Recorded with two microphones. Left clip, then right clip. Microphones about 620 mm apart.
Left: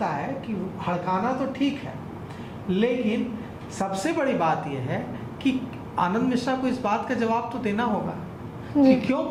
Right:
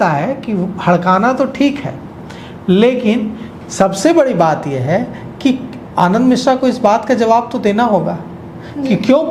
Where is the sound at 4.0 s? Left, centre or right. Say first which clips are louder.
Right 12 dB; right.